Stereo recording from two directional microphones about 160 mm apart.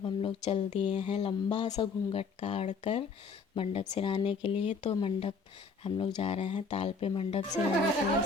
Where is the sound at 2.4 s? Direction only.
45° left (ahead or behind).